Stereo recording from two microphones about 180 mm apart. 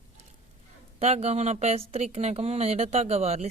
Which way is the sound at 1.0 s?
35° right (ahead or behind).